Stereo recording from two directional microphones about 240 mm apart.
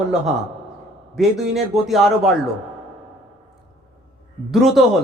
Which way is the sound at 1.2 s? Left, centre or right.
Centre.